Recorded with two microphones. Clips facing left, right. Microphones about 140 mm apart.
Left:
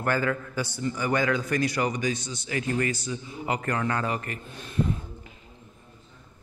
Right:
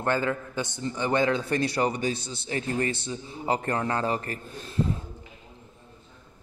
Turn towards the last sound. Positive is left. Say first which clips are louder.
# even
turn(degrees=-30)  # may be behind; listen again after turning